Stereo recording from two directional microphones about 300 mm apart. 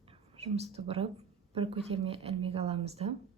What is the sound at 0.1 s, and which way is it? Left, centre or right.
A woman's voice, centre.